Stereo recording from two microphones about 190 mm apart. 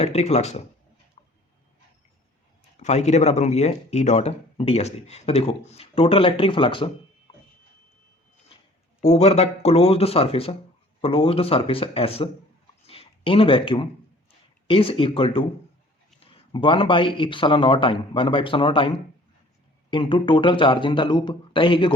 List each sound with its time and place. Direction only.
0.0 s speech: 35° left (ahead or behind)
2.7 s speech: 35° left (ahead or behind)
9.0 s speech: 35° left (ahead or behind)
12.8 s a sound: 30° left (ahead or behind)
14.7 s speech: 30° left (ahead or behind)